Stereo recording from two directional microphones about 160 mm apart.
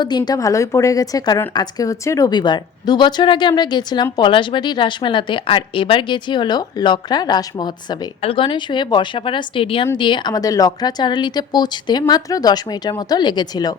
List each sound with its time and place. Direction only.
0.0 s a woman's voice: 25° left (ahead or behind)